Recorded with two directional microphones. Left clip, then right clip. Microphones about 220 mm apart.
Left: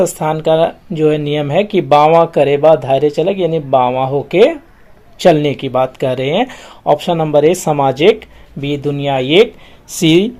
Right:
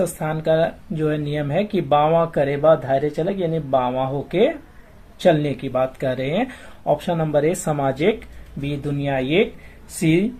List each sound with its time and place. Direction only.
0.0 s speech: 25° left (ahead or behind)